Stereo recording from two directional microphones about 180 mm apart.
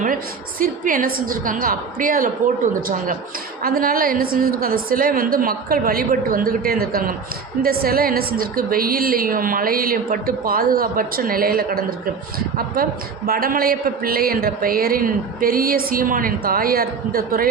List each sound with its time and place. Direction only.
0.6 s a woman's voice: 50° right (ahead or behind)
3.6 s a woman's voice: 55° right (ahead or behind)